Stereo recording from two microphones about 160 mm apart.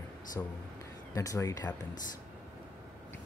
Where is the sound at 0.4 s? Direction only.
15° left (ahead or behind).